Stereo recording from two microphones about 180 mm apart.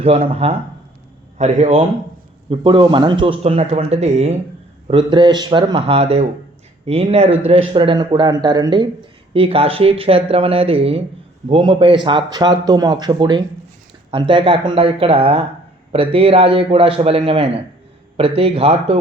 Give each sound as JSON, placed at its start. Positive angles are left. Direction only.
{"t": 0.0, "sound": "speech", "side_deg": -35}
{"t": 2.5, "sound": "speech", "side_deg": -25}